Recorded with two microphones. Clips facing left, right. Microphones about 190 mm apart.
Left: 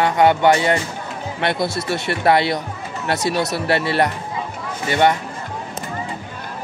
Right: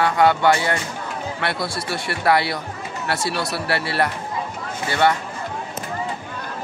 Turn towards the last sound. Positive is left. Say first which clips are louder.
# left 2 dB
turn(degrees=20)  # may be behind; listen again after turning